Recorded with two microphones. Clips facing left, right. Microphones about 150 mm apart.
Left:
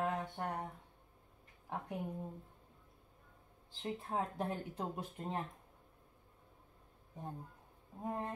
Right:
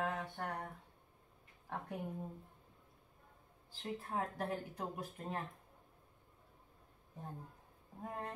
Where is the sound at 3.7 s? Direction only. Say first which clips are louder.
Left 2 dB; 20° left (ahead or behind).